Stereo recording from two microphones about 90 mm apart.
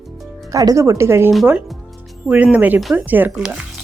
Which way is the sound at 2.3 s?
15° right (ahead or behind).